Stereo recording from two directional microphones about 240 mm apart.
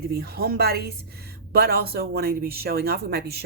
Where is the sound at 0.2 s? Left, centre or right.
Right.